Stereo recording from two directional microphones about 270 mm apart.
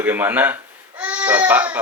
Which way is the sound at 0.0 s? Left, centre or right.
Centre.